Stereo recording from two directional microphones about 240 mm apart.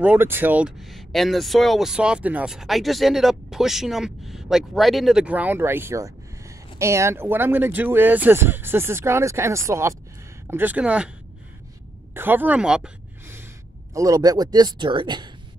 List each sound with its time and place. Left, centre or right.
0.0 s speech: centre
12.1 s a sound: centre
13.9 s speech: centre